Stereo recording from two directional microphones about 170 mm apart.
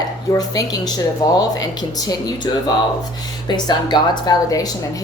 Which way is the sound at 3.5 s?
25° left (ahead or behind).